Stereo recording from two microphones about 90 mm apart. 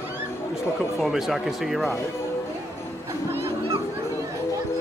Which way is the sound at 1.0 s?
5° right (ahead or behind).